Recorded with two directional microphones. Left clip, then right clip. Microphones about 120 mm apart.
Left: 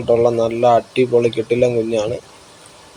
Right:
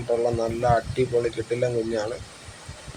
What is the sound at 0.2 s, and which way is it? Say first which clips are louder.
A man's voice: left 9 dB; 55° left (ahead or behind).